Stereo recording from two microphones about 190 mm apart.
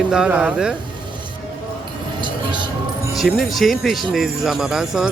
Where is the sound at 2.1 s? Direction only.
25° right (ahead or behind).